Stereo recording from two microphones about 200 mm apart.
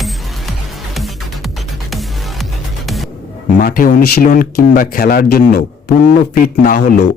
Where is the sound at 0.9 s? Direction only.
Centre (ahead or behind).